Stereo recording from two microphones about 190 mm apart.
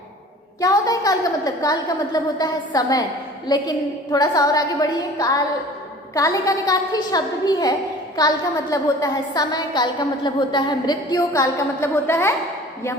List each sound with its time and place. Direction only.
0.6 s a woman's voice: 20° left (ahead or behind)